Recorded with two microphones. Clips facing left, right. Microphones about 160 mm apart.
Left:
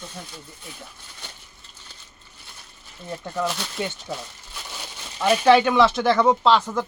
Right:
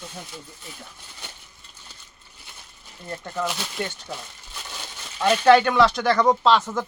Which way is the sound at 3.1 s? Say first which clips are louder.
Left 2 dB; centre (ahead or behind).